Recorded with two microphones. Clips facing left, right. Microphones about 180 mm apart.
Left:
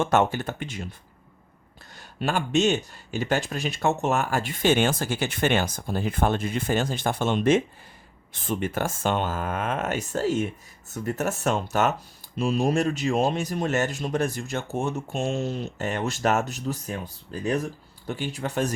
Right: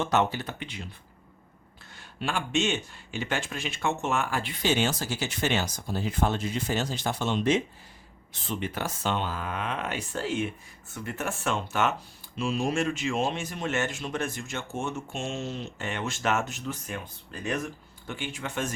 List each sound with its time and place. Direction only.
0.0 s speech: 50° left (ahead or behind)
2.0 s speech: 40° left (ahead or behind)